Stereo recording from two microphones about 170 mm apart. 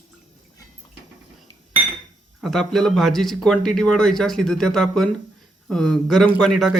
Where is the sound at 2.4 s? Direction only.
Centre (ahead or behind).